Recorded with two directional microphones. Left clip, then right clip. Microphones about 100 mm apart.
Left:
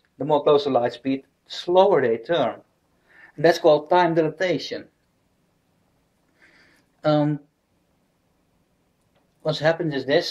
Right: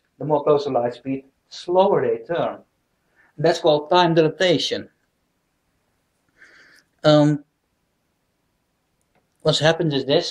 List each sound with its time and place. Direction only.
0.2 s speech: 15° left (ahead or behind)
6.4 s a sound: 5° left (ahead or behind)
9.4 s speech: 5° left (ahead or behind)